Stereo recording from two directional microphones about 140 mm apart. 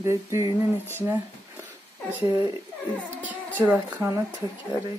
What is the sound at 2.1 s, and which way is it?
Speech, 15° right (ahead or behind).